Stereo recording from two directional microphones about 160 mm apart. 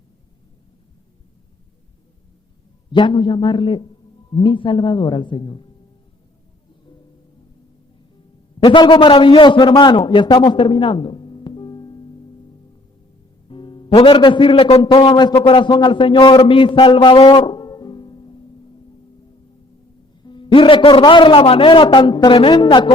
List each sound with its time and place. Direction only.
2.9 s a man's voice: 30° left (ahead or behind)
8.6 s a man's voice: 30° left (ahead or behind)
13.5 s a man's voice: 30° left (ahead or behind)
20.2 s a man's voice: 30° left (ahead or behind)